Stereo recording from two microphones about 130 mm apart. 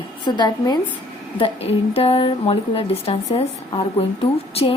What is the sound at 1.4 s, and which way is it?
A woman's voice, 50° left (ahead or behind).